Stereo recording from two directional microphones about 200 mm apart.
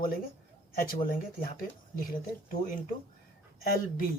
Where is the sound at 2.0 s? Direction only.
45° left (ahead or behind).